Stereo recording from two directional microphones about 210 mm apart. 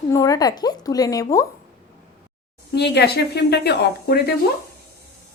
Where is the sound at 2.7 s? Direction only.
50° left (ahead or behind).